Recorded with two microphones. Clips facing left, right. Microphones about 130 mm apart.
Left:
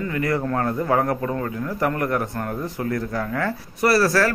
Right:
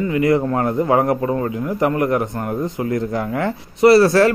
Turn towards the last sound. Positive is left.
turn(degrees=-25)  # may be behind; listen again after turning